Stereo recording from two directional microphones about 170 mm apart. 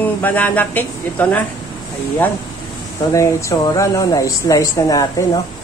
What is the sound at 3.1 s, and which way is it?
Speech, 20° left (ahead or behind).